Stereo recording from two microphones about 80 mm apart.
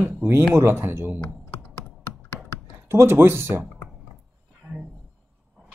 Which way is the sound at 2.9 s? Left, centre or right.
Right.